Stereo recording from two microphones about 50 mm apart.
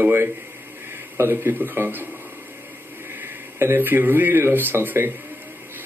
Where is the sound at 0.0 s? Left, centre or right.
Right.